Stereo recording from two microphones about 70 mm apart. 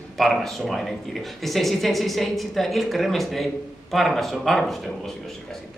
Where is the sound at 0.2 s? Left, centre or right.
Centre.